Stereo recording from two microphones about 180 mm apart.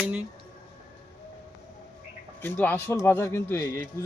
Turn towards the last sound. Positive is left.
turn(degrees=15)  # may be behind; listen again after turning